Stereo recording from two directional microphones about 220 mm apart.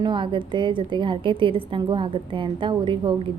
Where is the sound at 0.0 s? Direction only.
20° right (ahead or behind).